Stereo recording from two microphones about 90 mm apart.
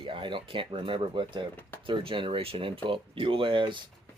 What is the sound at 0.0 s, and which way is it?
Speech, 70° right (ahead or behind).